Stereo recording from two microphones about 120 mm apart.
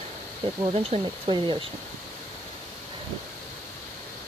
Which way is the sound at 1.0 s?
45° right (ahead or behind).